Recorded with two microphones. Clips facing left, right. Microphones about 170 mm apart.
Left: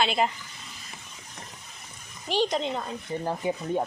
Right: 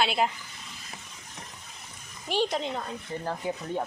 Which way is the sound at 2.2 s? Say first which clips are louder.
Left 2 dB; 10° right (ahead or behind).